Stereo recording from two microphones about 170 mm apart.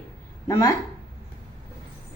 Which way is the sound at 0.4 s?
20° left (ahead or behind).